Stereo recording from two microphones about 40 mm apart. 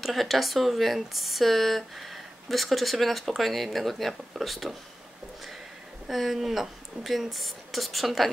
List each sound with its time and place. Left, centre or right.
0.0 s speech: centre
6.0 s speech: centre